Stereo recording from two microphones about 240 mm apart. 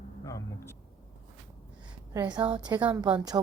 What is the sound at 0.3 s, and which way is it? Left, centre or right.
Speech, centre.